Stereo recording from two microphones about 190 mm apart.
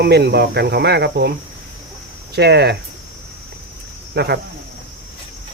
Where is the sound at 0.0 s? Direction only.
60° right (ahead or behind).